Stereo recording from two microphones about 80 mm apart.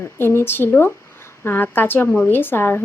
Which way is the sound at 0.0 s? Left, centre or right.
Left.